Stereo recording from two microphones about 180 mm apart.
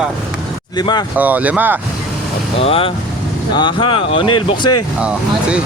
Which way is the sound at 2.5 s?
30° left (ahead or behind).